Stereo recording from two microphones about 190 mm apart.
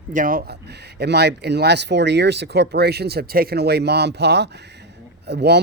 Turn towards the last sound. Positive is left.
turn(degrees=-60)  # may be behind; listen again after turning